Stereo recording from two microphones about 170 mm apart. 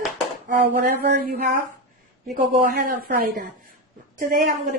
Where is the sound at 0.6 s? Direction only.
65° right (ahead or behind).